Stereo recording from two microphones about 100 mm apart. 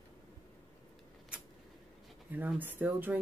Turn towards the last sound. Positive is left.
turn(degrees=-15)  # may be behind; listen again after turning